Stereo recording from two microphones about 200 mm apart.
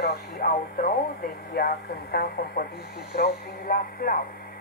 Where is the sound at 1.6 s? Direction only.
50° left (ahead or behind).